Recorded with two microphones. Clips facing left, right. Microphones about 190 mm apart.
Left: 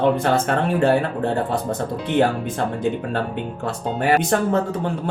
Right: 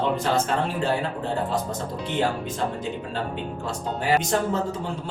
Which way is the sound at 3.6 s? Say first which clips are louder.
Left 6 dB; 60° left (ahead or behind).